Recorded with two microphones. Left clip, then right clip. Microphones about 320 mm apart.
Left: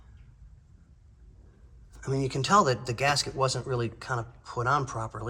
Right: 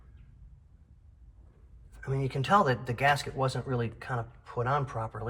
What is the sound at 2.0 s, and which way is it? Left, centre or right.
Speech, centre.